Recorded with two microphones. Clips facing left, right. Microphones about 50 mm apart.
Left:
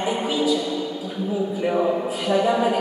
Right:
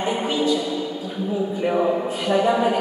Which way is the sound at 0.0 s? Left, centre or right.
Centre.